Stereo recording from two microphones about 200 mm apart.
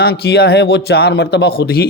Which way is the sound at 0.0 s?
55° left (ahead or behind).